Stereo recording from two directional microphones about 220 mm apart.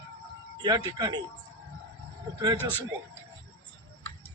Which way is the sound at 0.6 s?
20° right (ahead or behind).